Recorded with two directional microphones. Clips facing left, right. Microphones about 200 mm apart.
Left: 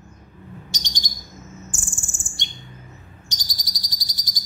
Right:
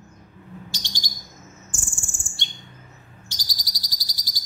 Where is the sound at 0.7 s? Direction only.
20° left (ahead or behind).